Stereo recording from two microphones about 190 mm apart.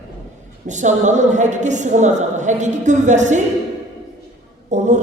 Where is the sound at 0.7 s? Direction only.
40° right (ahead or behind).